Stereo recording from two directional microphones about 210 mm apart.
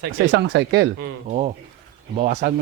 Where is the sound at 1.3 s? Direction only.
30° right (ahead or behind).